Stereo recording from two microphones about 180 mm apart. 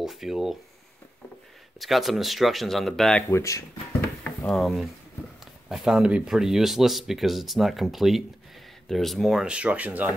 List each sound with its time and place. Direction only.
0.0 s speech: centre (ahead or behind)
1.8 s speech: centre (ahead or behind)
3.3 s speech: 15° left (ahead or behind)
4.2 s speech: 5° left (ahead or behind)